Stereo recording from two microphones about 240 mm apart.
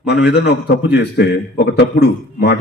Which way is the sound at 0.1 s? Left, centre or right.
Left.